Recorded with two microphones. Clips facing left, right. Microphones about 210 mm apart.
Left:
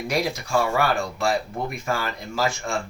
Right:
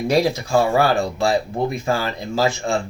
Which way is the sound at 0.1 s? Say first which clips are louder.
Right 6 dB; 30° right (ahead or behind).